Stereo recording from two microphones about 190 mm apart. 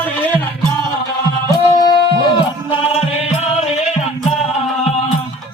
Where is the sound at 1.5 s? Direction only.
20° left (ahead or behind).